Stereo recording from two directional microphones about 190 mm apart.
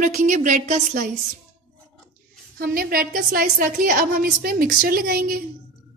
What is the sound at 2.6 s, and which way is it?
A woman's voice, 50° right (ahead or behind).